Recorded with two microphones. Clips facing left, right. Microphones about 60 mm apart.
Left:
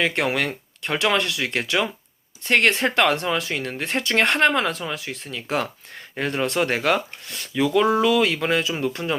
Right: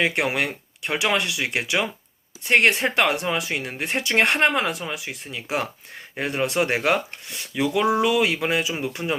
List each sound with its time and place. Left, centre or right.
0.0 s speech: centre